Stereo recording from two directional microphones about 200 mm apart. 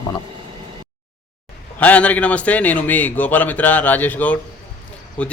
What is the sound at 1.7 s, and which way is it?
A man's voice, 10° left (ahead or behind).